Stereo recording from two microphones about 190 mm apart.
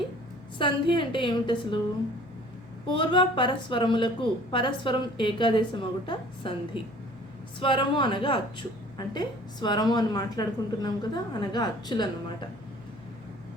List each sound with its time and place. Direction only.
0.6 s a woman's voice: 25° left (ahead or behind)
2.8 s a woman's voice: 25° left (ahead or behind)
7.6 s a woman's voice: 25° left (ahead or behind)